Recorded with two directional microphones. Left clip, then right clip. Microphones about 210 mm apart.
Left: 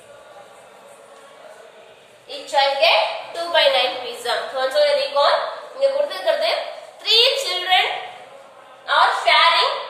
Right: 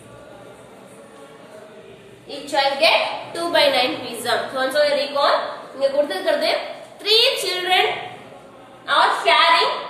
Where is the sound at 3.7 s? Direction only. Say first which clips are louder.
Even; 20° right (ahead or behind).